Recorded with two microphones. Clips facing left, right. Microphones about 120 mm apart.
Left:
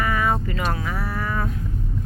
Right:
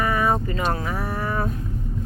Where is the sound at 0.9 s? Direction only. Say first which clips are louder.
Right 1 dB; 15° right (ahead or behind).